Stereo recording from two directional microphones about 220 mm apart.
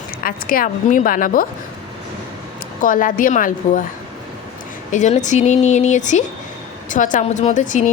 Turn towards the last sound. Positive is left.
turn(degrees=35)  # may be behind; listen again after turning